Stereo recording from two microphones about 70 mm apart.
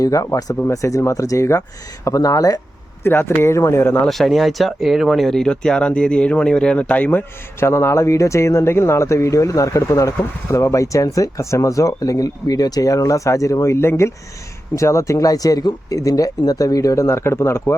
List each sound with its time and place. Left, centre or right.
0.0 s speech: left
3.0 s speech: left
3.8 s speech: left
4.1 s speech: centre; by 7.3 s left
7.6 s speech: left